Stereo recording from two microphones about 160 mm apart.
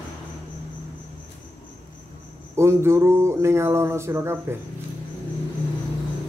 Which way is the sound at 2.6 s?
15° right (ahead or behind).